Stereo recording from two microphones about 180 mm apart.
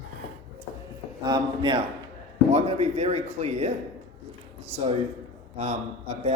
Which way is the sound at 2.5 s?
40° right (ahead or behind).